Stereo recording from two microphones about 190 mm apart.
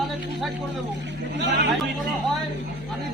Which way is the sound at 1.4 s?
65° right (ahead or behind).